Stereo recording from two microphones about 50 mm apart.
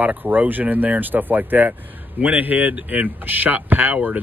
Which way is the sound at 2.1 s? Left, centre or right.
Right.